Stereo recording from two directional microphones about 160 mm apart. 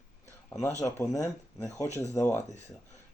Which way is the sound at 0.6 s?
20° left (ahead or behind).